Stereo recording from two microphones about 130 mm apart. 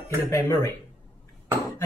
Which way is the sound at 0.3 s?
20° left (ahead or behind).